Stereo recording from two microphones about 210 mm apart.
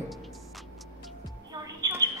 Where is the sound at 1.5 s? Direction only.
15° right (ahead or behind).